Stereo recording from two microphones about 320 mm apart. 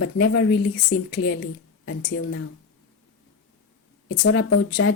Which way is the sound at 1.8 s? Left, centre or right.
Left.